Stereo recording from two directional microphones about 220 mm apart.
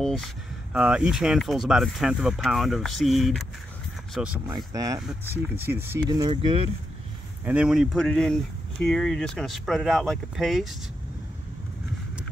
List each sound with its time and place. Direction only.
0.0 s speech: centre (ahead or behind)
4.6 s speech: 15° right (ahead or behind)
7.4 s speech: 5° right (ahead or behind)